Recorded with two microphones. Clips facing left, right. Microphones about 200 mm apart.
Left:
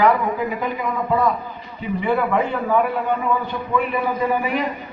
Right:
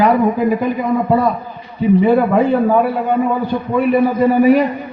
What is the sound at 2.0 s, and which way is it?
A man's voice, 45° right (ahead or behind).